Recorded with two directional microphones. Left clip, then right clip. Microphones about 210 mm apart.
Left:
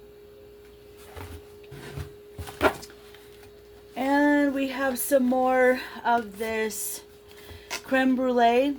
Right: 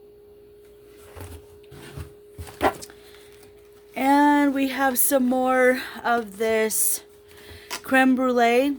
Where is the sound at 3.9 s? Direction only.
50° right (ahead or behind).